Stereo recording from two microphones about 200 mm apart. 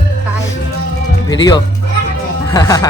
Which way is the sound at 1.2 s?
20° left (ahead or behind).